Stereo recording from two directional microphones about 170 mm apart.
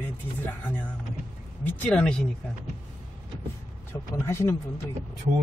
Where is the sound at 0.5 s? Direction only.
10° left (ahead or behind).